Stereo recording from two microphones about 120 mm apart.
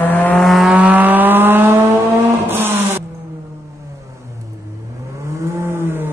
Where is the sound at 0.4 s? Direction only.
Centre (ahead or behind).